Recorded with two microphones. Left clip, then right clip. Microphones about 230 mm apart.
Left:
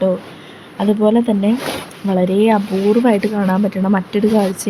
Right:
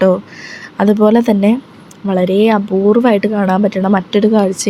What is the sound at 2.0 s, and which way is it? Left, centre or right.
Speech, centre.